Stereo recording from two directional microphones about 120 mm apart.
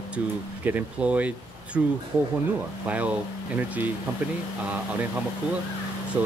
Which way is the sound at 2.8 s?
15° right (ahead or behind).